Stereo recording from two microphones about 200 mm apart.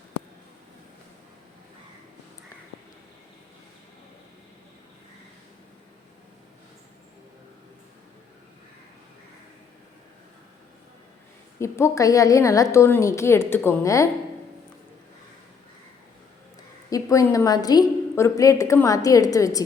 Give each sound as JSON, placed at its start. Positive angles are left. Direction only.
{"t": 11.6, "sound": "a woman's voice", "side_deg": 15}
{"t": 16.9, "sound": "a woman's voice", "side_deg": 15}